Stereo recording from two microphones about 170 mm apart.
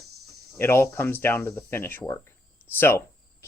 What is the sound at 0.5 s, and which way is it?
Speech, 15° left (ahead or behind).